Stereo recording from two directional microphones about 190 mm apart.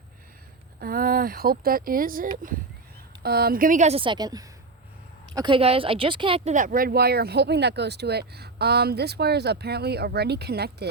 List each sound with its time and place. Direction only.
0.8 s a woman's voice: 50° right (ahead or behind)